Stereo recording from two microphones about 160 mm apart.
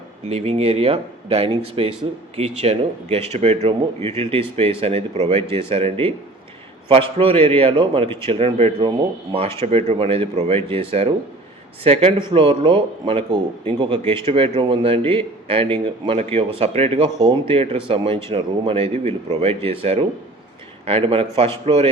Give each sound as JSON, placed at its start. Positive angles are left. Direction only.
{"t": 0.3, "sound": "a man's voice", "side_deg": -40}
{"t": 5.4, "sound": "speech", "side_deg": 15}
{"t": 5.6, "sound": "a man's voice", "side_deg": -35}